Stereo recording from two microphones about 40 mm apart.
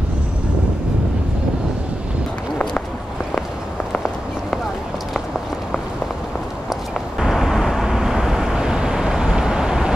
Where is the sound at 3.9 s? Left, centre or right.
Centre.